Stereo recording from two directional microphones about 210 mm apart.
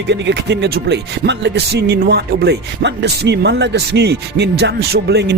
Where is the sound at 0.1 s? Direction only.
55° right (ahead or behind).